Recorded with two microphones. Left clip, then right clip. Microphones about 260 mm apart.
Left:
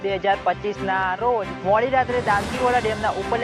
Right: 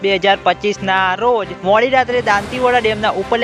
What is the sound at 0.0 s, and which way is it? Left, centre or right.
Speech, right.